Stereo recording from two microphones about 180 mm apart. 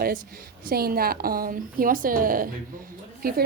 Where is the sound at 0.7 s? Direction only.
55° right (ahead or behind).